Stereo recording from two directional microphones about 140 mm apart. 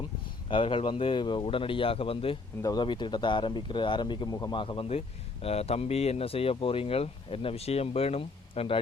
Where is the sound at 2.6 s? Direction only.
30° left (ahead or behind).